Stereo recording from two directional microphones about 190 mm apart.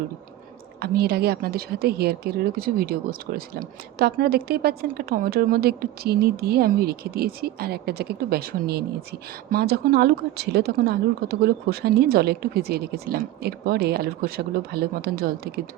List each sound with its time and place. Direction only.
0.8 s speech: 55° right (ahead or behind)